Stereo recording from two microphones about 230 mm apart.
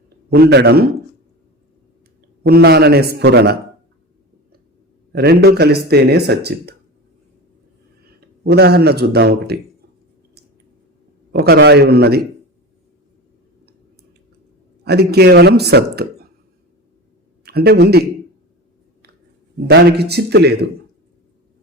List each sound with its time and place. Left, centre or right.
0.3 s speech: right
2.4 s speech: right
5.1 s speech: right
8.4 s speech: right
11.3 s speech: right
14.8 s speech: right
17.4 s speech: right
19.6 s speech: right